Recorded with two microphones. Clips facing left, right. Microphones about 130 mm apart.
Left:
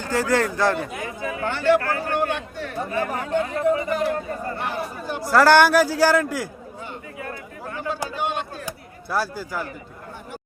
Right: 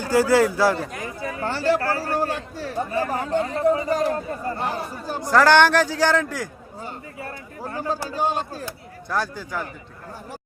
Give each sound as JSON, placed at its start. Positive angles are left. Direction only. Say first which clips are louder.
{"t": 0.0, "sound": "speech", "louder": "right 4 dB", "side_deg": -10}
{"t": 1.0, "sound": "a man's voice", "louder": "left 1 dB", "side_deg": -35}
{"t": 5.2, "sound": "a man's voice", "louder": "left 1 dB", "side_deg": 5}
{"t": 6.8, "sound": "a sound", "louder": "even", "side_deg": -35}
{"t": 8.1, "sound": "a man's voice", "louder": "right 2 dB", "side_deg": -35}
{"t": 8.6, "sound": "speech", "louder": "even", "side_deg": 10}